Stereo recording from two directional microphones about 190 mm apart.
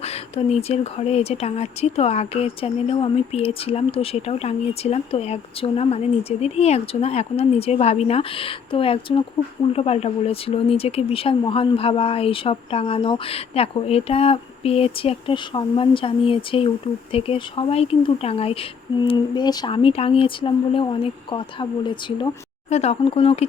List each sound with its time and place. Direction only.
0.0 s speech: 30° left (ahead or behind)